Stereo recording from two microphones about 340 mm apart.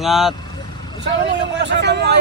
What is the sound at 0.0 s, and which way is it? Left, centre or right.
Speech, centre.